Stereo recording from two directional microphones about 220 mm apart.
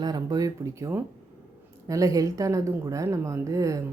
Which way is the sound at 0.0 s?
20° right (ahead or behind).